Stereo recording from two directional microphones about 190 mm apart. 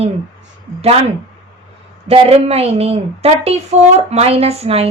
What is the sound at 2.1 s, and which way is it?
A woman's voice, 35° right (ahead or behind).